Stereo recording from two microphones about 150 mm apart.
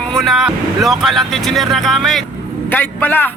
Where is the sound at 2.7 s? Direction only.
10° left (ahead or behind).